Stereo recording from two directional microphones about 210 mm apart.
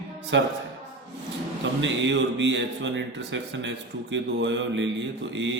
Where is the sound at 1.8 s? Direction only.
60° right (ahead or behind).